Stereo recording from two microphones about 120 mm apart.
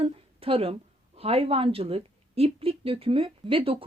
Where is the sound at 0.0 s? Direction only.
50° right (ahead or behind).